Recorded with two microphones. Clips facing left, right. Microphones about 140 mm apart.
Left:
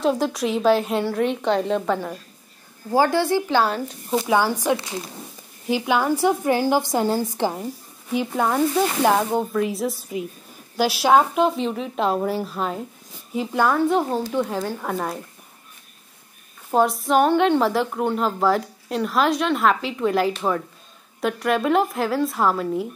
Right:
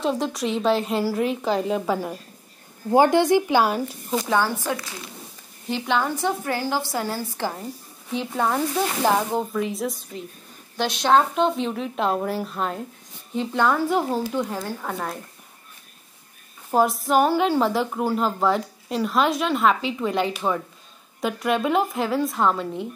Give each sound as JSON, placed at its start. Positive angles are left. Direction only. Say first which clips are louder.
{"t": 0.0, "sound": "a woman's voice", "louder": "left 3 dB", "side_deg": 0}
{"t": 2.9, "sound": "speech", "louder": "right 2 dB", "side_deg": -20}
{"t": 4.1, "sound": "a woman's voice", "louder": "left 3 dB", "side_deg": 15}
{"t": 4.7, "sound": "speech", "louder": "left 6 dB", "side_deg": 25}
{"t": 5.7, "sound": "a woman's voice", "louder": "left 3 dB", "side_deg": 10}
{"t": 8.1, "sound": "a woman's voice", "louder": "left 2 dB", "side_deg": 5}
{"t": 16.7, "sound": "a woman's voice", "louder": "left 1 dB", "side_deg": 0}